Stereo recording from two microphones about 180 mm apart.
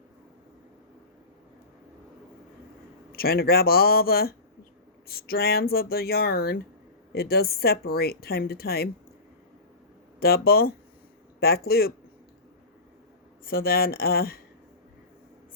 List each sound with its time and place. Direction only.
3.1 s speech: 55° left (ahead or behind)
10.2 s speech: 60° left (ahead or behind)
13.4 s speech: 55° left (ahead or behind)